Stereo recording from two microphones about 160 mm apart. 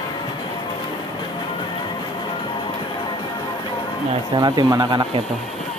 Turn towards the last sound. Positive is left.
turn(degrees=-30)  # may be behind; listen again after turning